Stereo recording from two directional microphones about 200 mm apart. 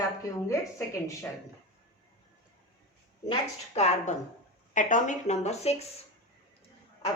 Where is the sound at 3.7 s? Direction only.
35° left (ahead or behind).